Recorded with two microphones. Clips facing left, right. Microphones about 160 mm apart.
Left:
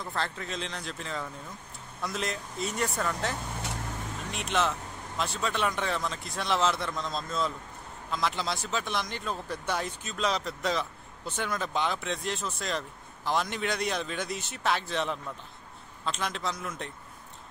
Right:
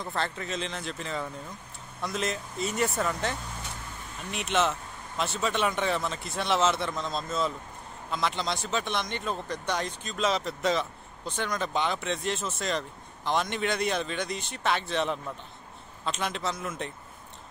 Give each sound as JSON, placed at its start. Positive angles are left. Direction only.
{"t": 0.0, "sound": "speech", "side_deg": 0}